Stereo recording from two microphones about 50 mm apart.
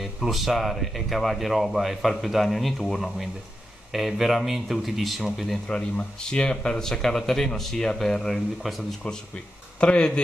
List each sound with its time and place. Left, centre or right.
0.0 s speech: centre
6.3 s speech: centre
7.7 s speech: centre
8.0 s speech: centre
9.8 s speech: centre